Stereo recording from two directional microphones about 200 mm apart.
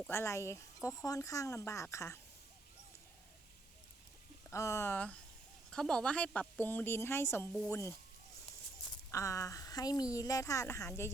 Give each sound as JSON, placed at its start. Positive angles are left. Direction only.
{"t": 0.1, "sound": "speech", "side_deg": 15}
{"t": 4.5, "sound": "speech", "side_deg": 15}
{"t": 9.1, "sound": "speech", "side_deg": 15}